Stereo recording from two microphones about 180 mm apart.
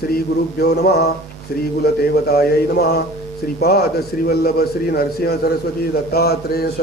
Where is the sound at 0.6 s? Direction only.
60° left (ahead or behind).